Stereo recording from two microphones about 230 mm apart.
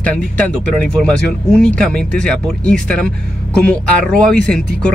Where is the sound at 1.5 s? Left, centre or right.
Centre.